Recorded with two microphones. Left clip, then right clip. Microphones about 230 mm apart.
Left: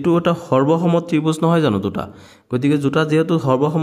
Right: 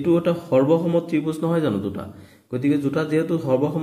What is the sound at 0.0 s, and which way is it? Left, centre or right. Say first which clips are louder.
A man's voice: left 3 dB; left.